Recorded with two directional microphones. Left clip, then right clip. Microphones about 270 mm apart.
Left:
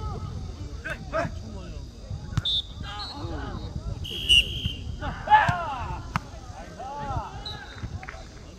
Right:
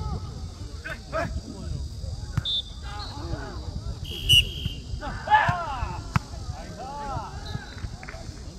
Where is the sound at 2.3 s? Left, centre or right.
Left.